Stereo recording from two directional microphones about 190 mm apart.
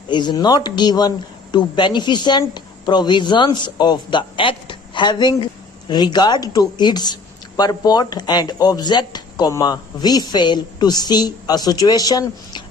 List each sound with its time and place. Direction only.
0.1 s a woman's voice: 25° left (ahead or behind)